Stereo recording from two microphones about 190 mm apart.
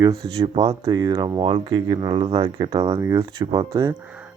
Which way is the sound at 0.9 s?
20° right (ahead or behind).